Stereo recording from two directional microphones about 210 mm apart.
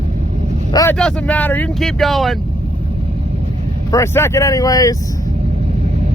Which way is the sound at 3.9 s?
10° left (ahead or behind).